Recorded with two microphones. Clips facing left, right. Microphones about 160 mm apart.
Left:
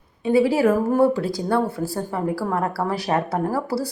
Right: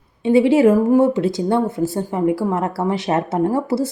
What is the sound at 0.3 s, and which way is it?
Speech, 25° right (ahead or behind).